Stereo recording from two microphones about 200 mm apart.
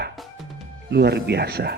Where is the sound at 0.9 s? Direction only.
55° right (ahead or behind).